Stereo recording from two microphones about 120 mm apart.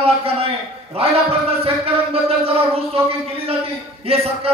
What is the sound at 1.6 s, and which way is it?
Speech, 50° right (ahead or behind).